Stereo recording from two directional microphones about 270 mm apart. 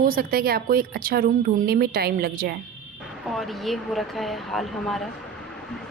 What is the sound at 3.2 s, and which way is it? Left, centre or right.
Speech, centre.